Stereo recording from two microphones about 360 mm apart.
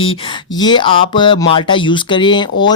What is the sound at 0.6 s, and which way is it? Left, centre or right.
Speech, centre.